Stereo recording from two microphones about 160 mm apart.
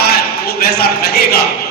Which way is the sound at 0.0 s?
75° left (ahead or behind).